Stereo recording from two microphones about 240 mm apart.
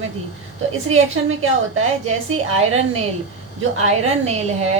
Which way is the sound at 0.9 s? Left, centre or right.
Right.